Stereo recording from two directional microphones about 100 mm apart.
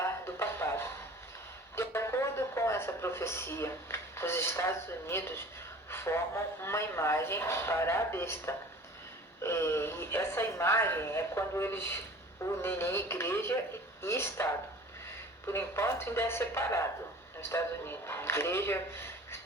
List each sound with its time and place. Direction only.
0.0 s a sound: 25° left (ahead or behind)
5.9 s speech: 25° left (ahead or behind)
15.4 s speech: 25° left (ahead or behind)